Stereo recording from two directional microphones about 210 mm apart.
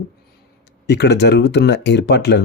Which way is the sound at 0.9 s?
55° left (ahead or behind).